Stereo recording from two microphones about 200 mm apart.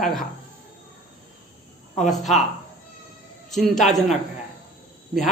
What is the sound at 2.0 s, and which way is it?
Speech, centre (ahead or behind).